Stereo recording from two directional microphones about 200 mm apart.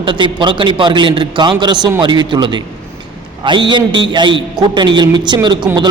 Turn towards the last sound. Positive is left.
turn(degrees=-20)  # may be behind; listen again after turning